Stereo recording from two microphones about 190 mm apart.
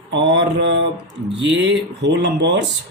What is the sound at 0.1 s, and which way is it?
Mantra, 65° right (ahead or behind).